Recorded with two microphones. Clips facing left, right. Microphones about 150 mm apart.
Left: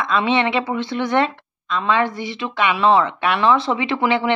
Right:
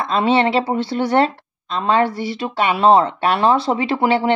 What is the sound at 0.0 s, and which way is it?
Speech, 35° right (ahead or behind).